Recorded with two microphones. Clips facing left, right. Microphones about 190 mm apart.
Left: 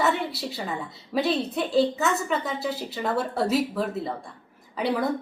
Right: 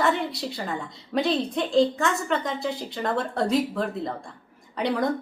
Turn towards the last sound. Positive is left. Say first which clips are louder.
# even
turn(degrees=5)  # may be behind; listen again after turning